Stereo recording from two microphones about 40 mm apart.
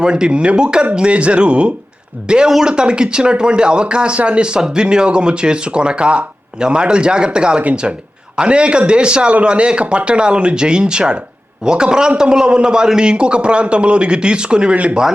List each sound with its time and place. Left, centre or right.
0.0 s a man's voice: right